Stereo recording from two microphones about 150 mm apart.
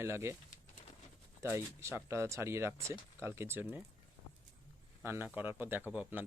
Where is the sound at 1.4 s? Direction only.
20° right (ahead or behind).